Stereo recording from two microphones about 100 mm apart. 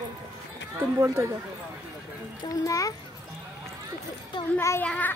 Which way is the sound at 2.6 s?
35° left (ahead or behind).